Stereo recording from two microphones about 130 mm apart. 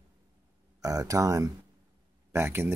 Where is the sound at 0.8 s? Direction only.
25° right (ahead or behind).